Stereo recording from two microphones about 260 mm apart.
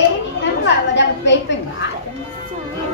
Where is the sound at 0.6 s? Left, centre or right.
Left.